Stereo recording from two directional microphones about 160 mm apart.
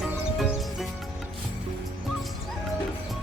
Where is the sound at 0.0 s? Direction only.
Centre (ahead or behind).